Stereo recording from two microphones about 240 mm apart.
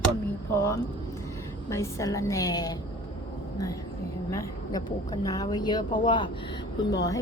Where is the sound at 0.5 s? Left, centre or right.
Centre.